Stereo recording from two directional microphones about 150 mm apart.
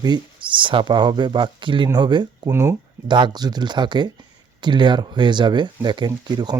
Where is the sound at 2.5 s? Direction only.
20° right (ahead or behind).